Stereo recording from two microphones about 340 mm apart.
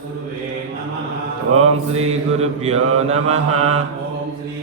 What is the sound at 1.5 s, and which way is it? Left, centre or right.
Mantra, centre.